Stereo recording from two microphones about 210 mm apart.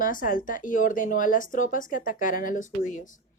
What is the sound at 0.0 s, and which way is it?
Speech, 40° left (ahead or behind).